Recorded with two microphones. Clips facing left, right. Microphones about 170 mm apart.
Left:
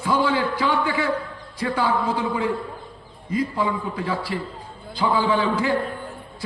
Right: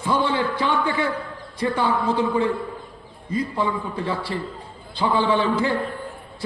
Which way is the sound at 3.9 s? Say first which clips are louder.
Even; 25° right (ahead or behind).